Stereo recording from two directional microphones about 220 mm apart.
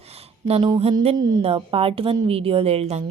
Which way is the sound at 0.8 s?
25° right (ahead or behind).